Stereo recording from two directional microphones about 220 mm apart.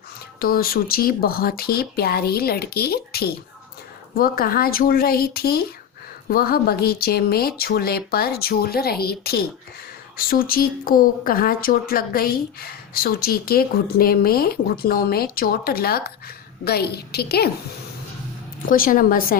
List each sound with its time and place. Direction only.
0.3 s speech: 40° left (ahead or behind)
18.7 s a woman's voice: 40° left (ahead or behind)